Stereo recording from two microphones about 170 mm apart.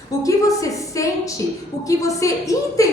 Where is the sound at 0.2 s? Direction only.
20° left (ahead or behind).